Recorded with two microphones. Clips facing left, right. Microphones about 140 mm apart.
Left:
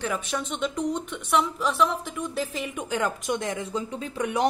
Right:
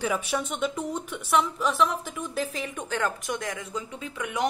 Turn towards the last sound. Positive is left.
turn(degrees=35)  # may be behind; listen again after turning